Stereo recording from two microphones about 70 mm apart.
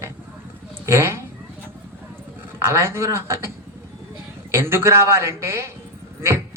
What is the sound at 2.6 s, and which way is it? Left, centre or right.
Speech, right.